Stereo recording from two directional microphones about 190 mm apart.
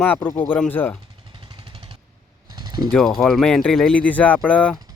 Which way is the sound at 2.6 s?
20° right (ahead or behind).